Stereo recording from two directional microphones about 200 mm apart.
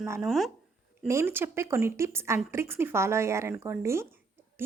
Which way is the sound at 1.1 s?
10° right (ahead or behind).